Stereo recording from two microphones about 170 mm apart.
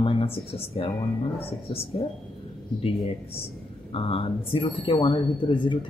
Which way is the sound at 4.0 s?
30° left (ahead or behind).